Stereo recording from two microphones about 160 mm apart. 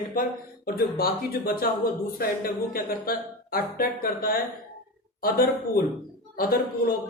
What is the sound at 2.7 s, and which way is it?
Speech, 65° left (ahead or behind).